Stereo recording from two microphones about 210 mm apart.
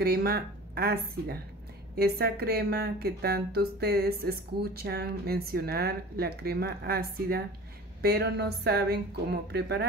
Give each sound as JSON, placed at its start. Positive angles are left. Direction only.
{"t": 0.0, "sound": "a woman's voice", "side_deg": -45}